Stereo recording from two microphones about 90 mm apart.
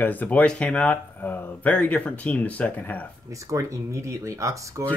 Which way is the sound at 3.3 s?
35° right (ahead or behind).